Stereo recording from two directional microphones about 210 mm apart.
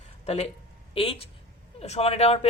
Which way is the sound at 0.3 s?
30° left (ahead or behind).